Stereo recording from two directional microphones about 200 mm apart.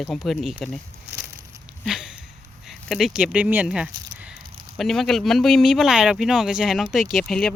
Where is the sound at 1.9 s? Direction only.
5° right (ahead or behind).